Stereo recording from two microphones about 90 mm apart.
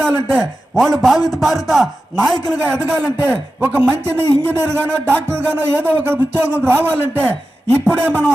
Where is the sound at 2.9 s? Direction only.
25° right (ahead or behind).